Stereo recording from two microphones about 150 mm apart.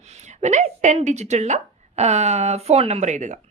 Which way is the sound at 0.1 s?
50° right (ahead or behind).